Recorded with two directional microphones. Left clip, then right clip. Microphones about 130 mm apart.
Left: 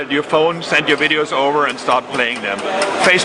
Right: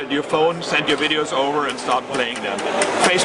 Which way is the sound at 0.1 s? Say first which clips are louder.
Left 3 dB; 20° left (ahead or behind).